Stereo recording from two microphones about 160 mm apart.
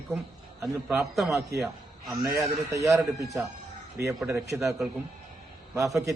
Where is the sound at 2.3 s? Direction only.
20° right (ahead or behind).